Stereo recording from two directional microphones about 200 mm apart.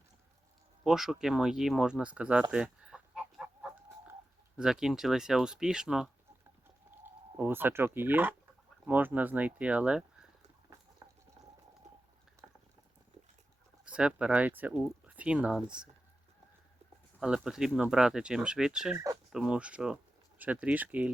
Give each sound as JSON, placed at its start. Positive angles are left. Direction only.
{"t": 0.9, "sound": "speech", "side_deg": 0}
{"t": 12.4, "sound": "boiling", "side_deg": -15}
{"t": 13.8, "sound": "speech", "side_deg": -5}
{"t": 17.2, "sound": "speech", "side_deg": -5}
{"t": 18.9, "sound": "a sound", "side_deg": -15}
{"t": 19.3, "sound": "speech", "side_deg": -5}